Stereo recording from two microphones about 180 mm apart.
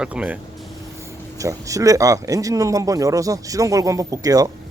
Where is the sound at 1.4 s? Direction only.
20° right (ahead or behind).